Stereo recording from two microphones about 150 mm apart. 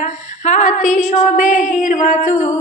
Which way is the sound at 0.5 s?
55° left (ahead or behind).